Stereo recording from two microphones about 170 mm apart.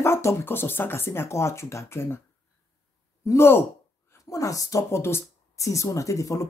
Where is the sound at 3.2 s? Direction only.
15° left (ahead or behind).